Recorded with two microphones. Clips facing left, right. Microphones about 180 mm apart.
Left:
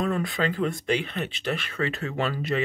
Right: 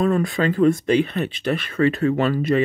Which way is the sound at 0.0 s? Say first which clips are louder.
Right 6 dB; 45° right (ahead or behind).